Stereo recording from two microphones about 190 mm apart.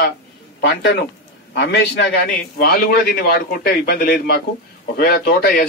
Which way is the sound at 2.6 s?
50° left (ahead or behind).